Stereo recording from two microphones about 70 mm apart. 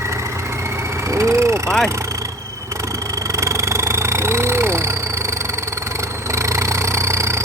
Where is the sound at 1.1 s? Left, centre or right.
Right.